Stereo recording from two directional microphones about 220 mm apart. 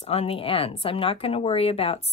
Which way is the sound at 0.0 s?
25° left (ahead or behind).